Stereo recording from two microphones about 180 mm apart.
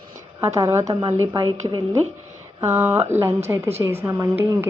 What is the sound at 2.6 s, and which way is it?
Speech, 10° right (ahead or behind).